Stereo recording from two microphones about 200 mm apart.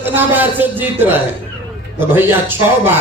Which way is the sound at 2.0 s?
10° right (ahead or behind).